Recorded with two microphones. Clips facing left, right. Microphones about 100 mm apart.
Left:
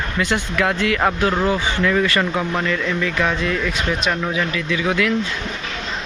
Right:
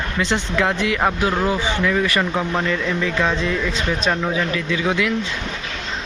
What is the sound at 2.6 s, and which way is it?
Speech, 25° right (ahead or behind).